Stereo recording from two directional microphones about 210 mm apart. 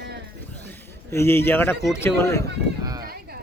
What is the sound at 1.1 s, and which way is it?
A man's voice, 10° left (ahead or behind).